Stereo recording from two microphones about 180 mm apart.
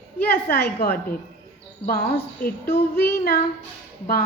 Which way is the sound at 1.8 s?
55° left (ahead or behind).